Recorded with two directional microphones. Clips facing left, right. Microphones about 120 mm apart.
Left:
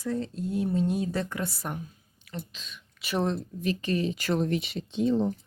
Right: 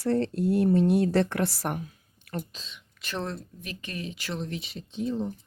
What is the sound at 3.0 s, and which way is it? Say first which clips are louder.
Speech: left 5 dB; 15° left (ahead or behind).